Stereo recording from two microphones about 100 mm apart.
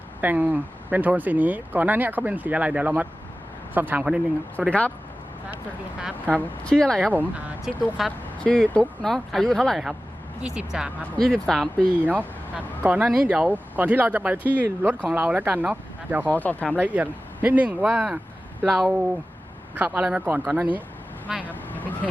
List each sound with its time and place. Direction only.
0.2 s speech: 15° right (ahead or behind)
6.0 s speech: 10° right (ahead or behind)
6.7 s speech: 5° left (ahead or behind)
10.4 s speech: 10° right (ahead or behind)
11.0 s speech: 5° left (ahead or behind)
11.9 s speech: 15° right (ahead or behind)
16.3 s speech: 15° left (ahead or behind)
16.8 s speech: 15° right (ahead or behind)
18.6 s speech: centre (ahead or behind)
19.7 s speech: 20° right (ahead or behind)
21.4 s vehicle: 20° left (ahead or behind)